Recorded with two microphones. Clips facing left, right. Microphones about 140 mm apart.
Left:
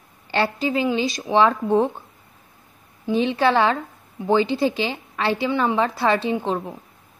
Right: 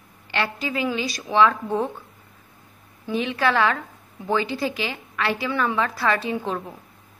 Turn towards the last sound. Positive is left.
turn(degrees=25)  # may be behind; listen again after turning